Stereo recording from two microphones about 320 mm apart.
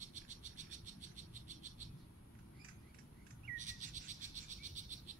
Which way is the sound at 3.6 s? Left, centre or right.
Right.